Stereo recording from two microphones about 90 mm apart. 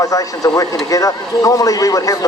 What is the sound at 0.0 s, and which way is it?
Speech, 40° left (ahead or behind).